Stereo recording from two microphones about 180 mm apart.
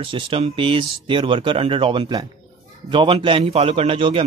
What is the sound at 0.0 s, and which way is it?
A man's voice, 30° right (ahead or behind).